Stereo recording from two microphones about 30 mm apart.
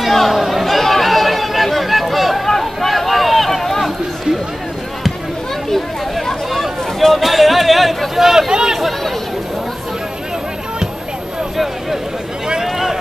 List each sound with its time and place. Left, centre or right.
0.0 s chatter: centre
2.4 s run: centre
7.2 s a sound: centre
8.5 s speech: right
8.7 s chatter: centre
11.5 s a sound: centre